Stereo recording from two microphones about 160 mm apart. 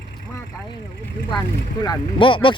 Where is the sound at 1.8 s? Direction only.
30° left (ahead or behind).